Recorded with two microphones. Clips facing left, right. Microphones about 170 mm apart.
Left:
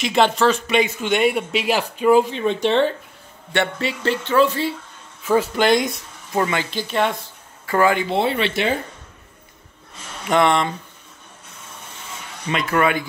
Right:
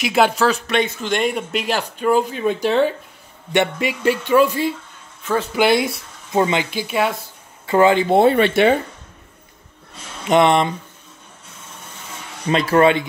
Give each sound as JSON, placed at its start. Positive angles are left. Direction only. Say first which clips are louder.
{"t": 0.0, "sound": "speech", "louder": "right 1 dB", "side_deg": -5}
{"t": 5.2, "sound": "speech", "louder": "left 3 dB", "side_deg": 10}
{"t": 5.5, "sound": "speech", "louder": "right 1 dB", "side_deg": -5}
{"t": 6.3, "sound": "speech", "louder": "right 3 dB", "side_deg": -20}
{"t": 7.6, "sound": "speech", "louder": "right 4 dB", "side_deg": -25}
{"t": 8.1, "sound": "speech", "louder": "right 7 dB", "side_deg": -50}
{"t": 10.2, "sound": "speech", "louder": "right 3 dB", "side_deg": -20}
{"t": 12.4, "sound": "speech", "louder": "right 5 dB", "side_deg": -30}